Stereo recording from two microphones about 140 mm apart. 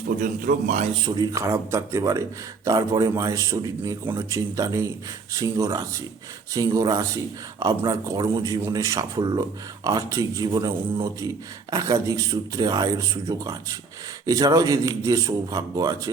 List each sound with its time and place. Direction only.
0.2 s a man's voice: 65° right (ahead or behind)
1.0 s speech: 30° right (ahead or behind)